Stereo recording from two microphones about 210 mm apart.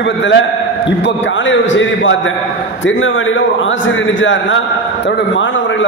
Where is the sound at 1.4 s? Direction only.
65° left (ahead or behind).